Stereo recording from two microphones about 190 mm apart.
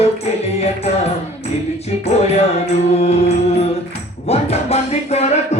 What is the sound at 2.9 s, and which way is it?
Music, 35° left (ahead or behind).